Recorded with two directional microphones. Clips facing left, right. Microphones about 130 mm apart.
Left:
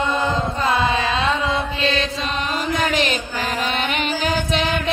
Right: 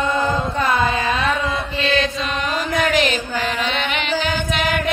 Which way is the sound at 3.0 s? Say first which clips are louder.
Right 2 dB; 40° left (ahead or behind).